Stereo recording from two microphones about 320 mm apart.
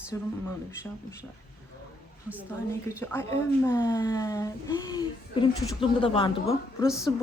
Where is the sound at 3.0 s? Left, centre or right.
Centre.